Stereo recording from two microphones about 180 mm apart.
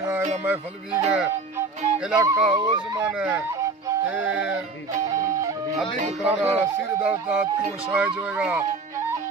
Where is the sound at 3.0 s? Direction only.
10° right (ahead or behind).